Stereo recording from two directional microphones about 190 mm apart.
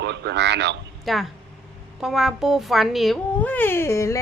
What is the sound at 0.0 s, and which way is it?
Speech, 65° right (ahead or behind).